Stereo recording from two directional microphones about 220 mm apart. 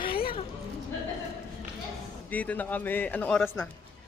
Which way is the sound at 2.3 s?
5° left (ahead or behind).